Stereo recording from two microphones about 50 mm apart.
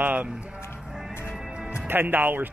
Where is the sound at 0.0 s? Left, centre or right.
Right.